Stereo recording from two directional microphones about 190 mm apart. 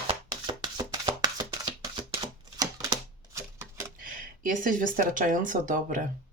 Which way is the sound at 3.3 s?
15° right (ahead or behind).